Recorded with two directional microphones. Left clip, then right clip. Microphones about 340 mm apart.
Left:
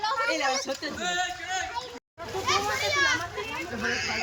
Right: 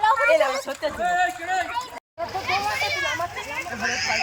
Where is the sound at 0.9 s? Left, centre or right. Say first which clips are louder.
Right 8 dB; right.